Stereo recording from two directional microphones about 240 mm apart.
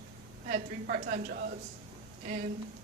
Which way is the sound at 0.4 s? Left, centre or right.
Right.